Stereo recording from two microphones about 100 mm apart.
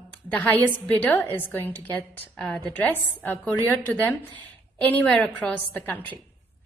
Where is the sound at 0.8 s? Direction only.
20° left (ahead or behind).